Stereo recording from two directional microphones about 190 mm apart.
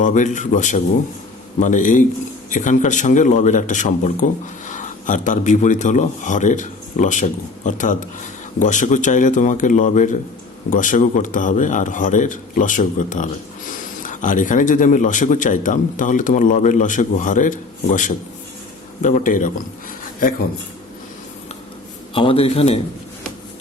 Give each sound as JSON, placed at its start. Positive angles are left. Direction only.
{"t": 0.0, "sound": "a man's voice", "side_deg": 40}
{"t": 22.1, "sound": "a man's voice", "side_deg": 30}